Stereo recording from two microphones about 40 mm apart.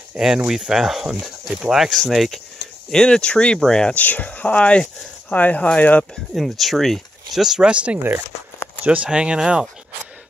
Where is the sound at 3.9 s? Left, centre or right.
Left.